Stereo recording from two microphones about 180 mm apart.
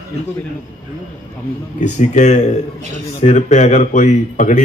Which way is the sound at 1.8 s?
40° left (ahead or behind).